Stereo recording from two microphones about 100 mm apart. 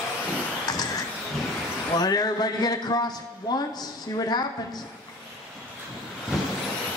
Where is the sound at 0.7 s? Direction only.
40° left (ahead or behind).